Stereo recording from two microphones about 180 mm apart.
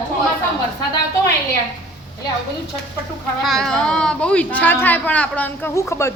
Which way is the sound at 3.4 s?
Centre (ahead or behind).